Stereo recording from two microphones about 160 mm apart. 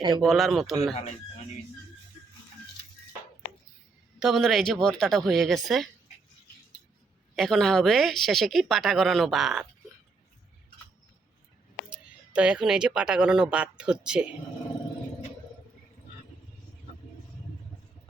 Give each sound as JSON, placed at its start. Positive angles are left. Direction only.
{"t": 0.0, "sound": "speech", "side_deg": -25}
{"t": 0.3, "sound": "speech", "side_deg": 0}
{"t": 4.2, "sound": "speech", "side_deg": 0}
{"t": 7.3, "sound": "speech", "side_deg": 0}
{"t": 11.9, "sound": "speech", "side_deg": -5}